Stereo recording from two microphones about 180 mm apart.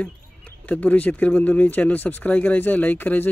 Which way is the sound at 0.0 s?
10° left (ahead or behind).